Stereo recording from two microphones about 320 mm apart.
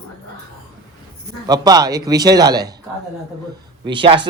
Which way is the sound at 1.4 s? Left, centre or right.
Centre.